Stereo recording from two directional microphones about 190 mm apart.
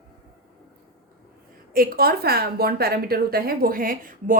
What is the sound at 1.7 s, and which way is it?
A woman's voice, 50° right (ahead or behind).